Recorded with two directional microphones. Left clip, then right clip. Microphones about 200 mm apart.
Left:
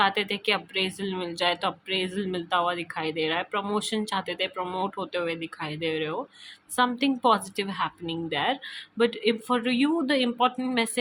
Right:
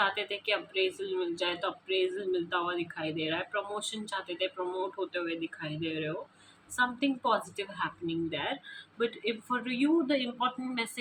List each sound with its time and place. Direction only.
0.0 s speech: 60° left (ahead or behind)